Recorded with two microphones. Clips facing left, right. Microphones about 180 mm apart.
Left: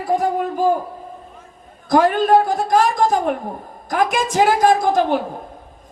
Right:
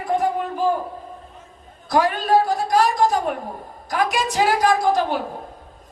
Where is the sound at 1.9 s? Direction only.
45° left (ahead or behind).